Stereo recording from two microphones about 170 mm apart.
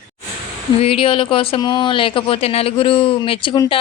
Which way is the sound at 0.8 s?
35° left (ahead or behind).